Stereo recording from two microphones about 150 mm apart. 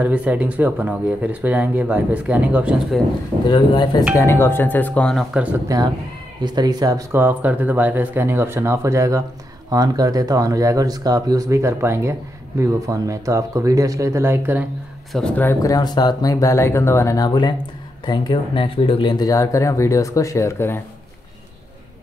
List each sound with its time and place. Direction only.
0.0 s speech: 10° right (ahead or behind)
3.4 s speech: 30° left (ahead or behind)
4.2 s speech: 15° left (ahead or behind)
5.3 s speech: 10° right (ahead or behind)
6.4 s speech: 25° right (ahead or behind)
15.1 s speech: 10° left (ahead or behind)
15.6 s speech: 25° left (ahead or behind)